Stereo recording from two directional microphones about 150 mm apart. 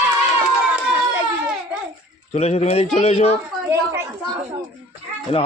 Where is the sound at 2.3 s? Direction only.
45° left (ahead or behind).